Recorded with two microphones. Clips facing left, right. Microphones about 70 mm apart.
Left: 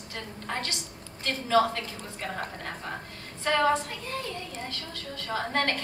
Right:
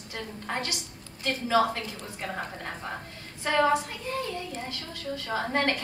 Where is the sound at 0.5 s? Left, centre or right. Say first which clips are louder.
Right 1 dB; centre.